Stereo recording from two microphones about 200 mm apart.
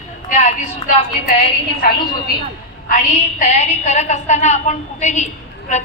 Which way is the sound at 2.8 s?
40° left (ahead or behind).